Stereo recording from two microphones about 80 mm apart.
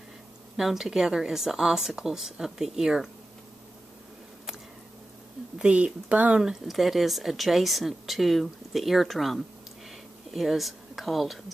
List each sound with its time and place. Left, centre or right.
0.6 s speech: centre
5.6 s speech: centre
6.4 s speech: centre
9.8 s a sound: centre